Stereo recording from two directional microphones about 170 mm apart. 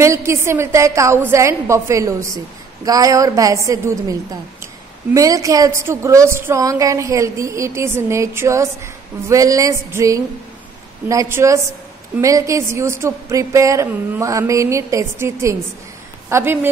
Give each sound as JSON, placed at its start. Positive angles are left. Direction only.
{"t": 0.0, "sound": "a woman's voice", "side_deg": -15}